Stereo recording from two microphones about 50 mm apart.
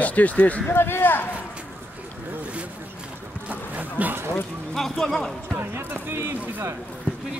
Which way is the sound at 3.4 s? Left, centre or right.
Right.